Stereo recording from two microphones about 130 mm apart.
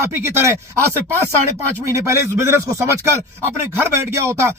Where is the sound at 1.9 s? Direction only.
20° right (ahead or behind).